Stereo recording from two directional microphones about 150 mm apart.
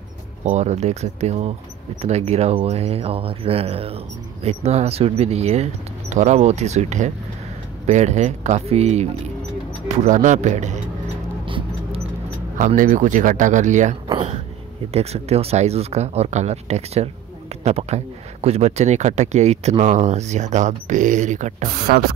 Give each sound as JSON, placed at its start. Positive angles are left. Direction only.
{"t": 0.5, "sound": "speech", "side_deg": -50}
{"t": 9.8, "sound": "speech", "side_deg": -55}
{"t": 11.4, "sound": "mouse", "side_deg": -35}
{"t": 12.5, "sound": "speech", "side_deg": -60}